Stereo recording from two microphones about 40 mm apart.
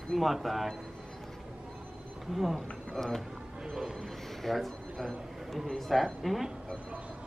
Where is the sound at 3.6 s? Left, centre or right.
Centre.